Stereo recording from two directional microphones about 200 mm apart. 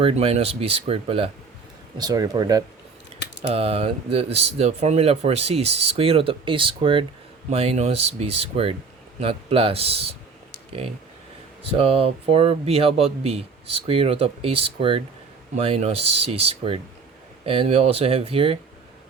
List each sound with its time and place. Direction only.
0.0 s speech: 30° right (ahead or behind)
3.4 s speech: 30° right (ahead or behind)